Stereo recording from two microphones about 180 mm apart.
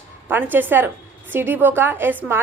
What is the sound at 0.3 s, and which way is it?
A woman's voice, 10° right (ahead or behind).